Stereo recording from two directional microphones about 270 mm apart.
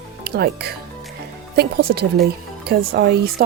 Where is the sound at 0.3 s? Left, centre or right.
Right.